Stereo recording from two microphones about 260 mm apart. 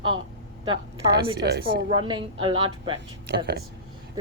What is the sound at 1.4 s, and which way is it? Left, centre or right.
Speech, right.